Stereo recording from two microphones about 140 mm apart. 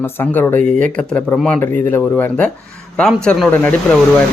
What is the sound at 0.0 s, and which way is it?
Speech, 15° left (ahead or behind).